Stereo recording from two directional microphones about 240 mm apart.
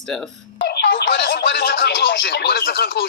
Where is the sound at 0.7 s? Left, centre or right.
Left.